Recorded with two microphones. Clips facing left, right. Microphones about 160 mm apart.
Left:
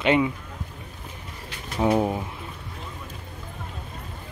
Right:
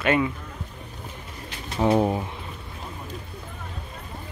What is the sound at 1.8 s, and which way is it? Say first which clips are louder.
Speech: right 1 dB; centre (ahead or behind).